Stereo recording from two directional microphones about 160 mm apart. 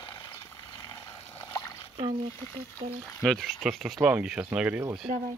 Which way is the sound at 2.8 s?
35° right (ahead or behind).